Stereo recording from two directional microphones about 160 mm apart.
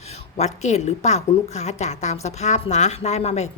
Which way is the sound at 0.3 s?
45° left (ahead or behind).